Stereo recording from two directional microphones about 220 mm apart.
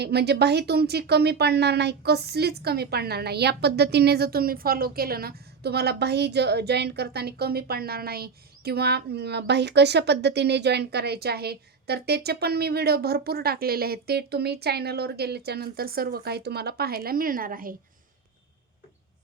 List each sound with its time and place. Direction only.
0.0 s speech: 50° right (ahead or behind)